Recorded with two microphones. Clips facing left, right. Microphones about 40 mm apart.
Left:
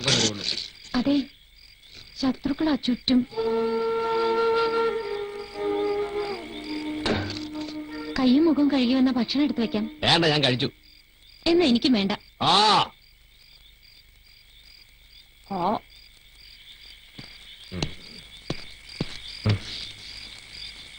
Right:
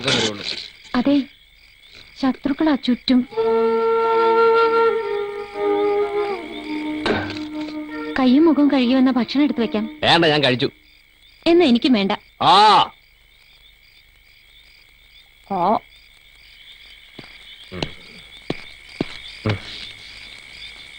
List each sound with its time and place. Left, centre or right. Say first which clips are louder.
0.0 s speech: right 4 dB; right
1.9 s music: right 5 dB; right
11.4 s speech: right 6 dB; right
15.4 s frog: right 7 dB; right